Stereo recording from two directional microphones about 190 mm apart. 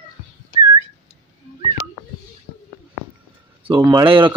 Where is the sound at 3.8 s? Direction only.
25° right (ahead or behind).